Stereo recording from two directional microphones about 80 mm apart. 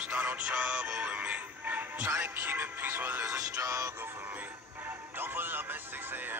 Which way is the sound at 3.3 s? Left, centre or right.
Right.